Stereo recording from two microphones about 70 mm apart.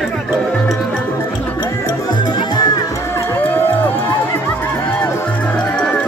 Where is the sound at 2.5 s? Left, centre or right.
Left.